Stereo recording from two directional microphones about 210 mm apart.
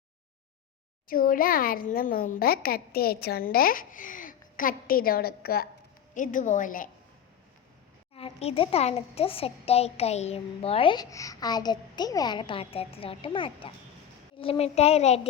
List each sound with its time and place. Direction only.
1.0 s a child's voice: 40° left (ahead or behind)
8.1 s speech: 30° left (ahead or behind)